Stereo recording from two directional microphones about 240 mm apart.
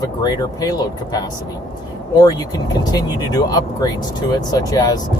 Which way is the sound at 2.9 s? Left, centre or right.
Centre.